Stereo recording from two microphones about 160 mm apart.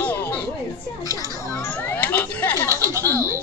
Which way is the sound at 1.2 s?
15° left (ahead or behind).